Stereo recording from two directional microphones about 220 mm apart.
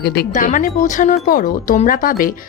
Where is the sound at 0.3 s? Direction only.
35° left (ahead or behind).